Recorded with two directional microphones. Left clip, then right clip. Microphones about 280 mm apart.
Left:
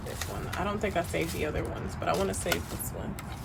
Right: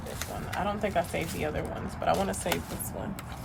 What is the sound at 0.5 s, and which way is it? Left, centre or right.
Speech, centre.